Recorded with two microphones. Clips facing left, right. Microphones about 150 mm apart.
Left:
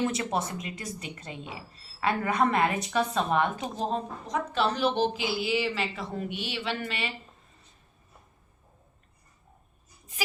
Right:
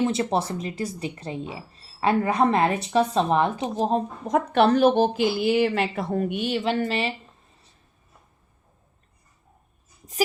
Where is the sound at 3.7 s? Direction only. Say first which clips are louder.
Right 7 dB; 40° right (ahead or behind).